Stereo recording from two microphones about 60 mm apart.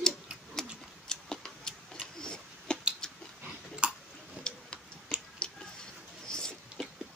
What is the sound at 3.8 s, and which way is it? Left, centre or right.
Tick-tock, centre.